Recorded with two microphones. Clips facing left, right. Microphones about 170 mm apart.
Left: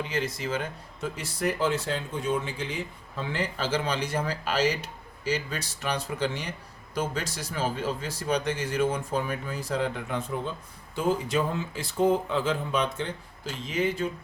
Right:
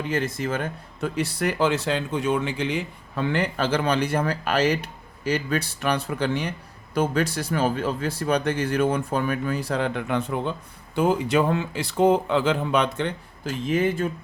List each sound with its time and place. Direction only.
0.1 s speech: 50° right (ahead or behind)